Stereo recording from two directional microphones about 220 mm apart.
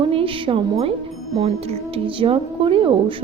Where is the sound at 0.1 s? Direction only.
25° right (ahead or behind).